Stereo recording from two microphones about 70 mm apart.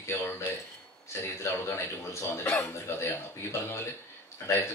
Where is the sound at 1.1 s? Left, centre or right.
Left.